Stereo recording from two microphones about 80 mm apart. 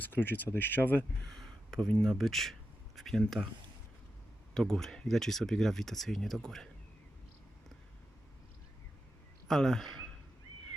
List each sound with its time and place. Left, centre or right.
0.0 s speech: left
1.3 s a sound: centre
1.9 s speech: centre
4.5 s speech: centre
9.5 s speech: centre